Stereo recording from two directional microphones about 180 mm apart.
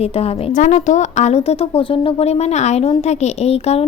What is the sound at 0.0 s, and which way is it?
A woman's voice, 40° left (ahead or behind).